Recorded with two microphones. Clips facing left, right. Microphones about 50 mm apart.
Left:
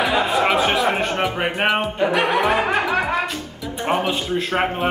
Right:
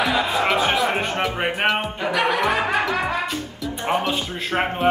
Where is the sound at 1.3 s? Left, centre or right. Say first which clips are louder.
Left 1 dB; centre.